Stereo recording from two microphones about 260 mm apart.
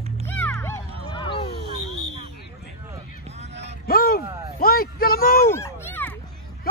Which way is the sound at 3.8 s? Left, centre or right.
Left.